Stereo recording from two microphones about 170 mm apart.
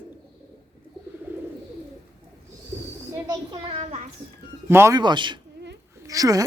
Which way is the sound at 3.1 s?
20° right (ahead or behind).